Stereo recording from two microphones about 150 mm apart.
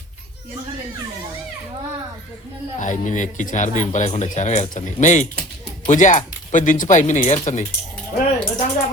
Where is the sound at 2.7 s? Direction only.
55° left (ahead or behind).